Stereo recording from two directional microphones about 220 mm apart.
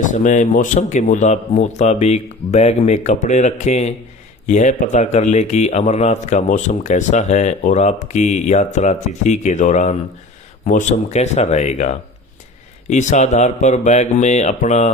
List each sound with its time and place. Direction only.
0.0 s speech: 35° left (ahead or behind)